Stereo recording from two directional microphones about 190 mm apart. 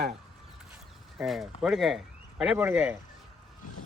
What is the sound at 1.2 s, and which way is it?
Speech, centre (ahead or behind).